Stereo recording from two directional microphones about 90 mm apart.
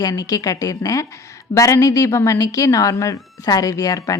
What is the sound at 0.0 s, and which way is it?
Speech, 45° left (ahead or behind).